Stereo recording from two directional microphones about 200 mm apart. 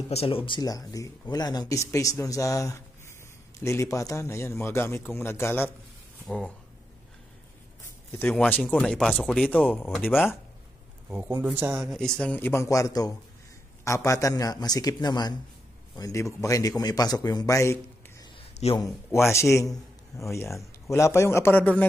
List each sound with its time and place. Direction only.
0.1 s a man's voice: 30° left (ahead or behind)
0.5 s speech: 20° left (ahead or behind)
8.1 s speech: 10° left (ahead or behind)
12.2 s a man's voice: 10° left (ahead or behind)
18.3 s a sound: 30° left (ahead or behind)
18.9 s speech: centre (ahead or behind)
19.3 s speech: 15° left (ahead or behind)